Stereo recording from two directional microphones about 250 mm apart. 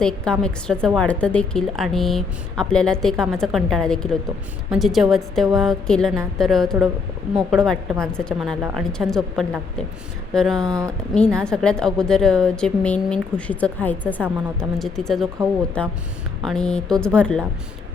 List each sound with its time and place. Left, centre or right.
0.0 s a woman's voice: centre
10.7 s speech: centre
11.1 s a woman's voice: centre